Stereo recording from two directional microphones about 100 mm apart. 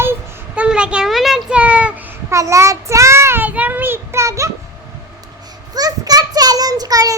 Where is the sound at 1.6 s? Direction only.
15° right (ahead or behind).